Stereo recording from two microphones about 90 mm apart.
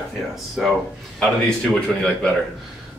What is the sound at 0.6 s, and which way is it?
Speech, 5° right (ahead or behind).